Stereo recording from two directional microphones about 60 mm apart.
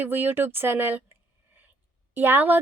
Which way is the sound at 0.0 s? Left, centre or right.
Right.